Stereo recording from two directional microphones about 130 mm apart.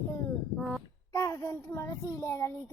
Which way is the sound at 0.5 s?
Centre (ahead or behind).